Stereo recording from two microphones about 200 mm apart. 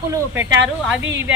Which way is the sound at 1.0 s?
65° right (ahead or behind).